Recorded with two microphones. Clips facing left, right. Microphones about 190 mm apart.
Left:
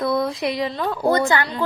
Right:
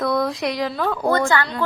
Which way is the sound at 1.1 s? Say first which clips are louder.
Left 1 dB; 20° left (ahead or behind).